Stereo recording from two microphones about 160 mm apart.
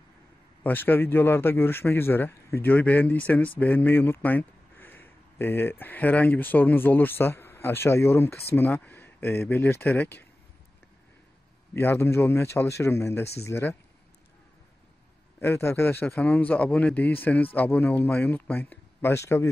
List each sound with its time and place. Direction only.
0.7 s speech: 10° left (ahead or behind)
11.7 s speech: 15° left (ahead or behind)
15.4 s speech: 15° left (ahead or behind)